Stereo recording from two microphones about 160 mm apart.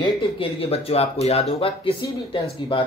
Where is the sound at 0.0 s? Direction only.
35° left (ahead or behind).